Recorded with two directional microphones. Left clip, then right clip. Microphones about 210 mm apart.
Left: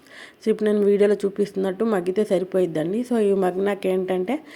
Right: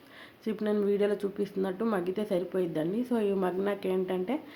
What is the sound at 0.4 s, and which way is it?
A woman's voice, 35° left (ahead or behind).